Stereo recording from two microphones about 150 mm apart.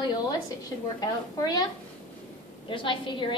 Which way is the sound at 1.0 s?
25° left (ahead or behind).